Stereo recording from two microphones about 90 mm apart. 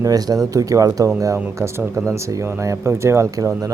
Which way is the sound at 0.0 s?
45° right (ahead or behind).